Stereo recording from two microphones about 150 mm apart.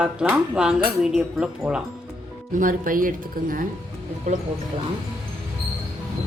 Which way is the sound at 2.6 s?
65° right (ahead or behind).